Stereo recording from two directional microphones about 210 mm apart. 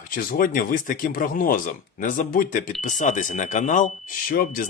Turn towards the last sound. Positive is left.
turn(degrees=45)  # may be behind; listen again after turning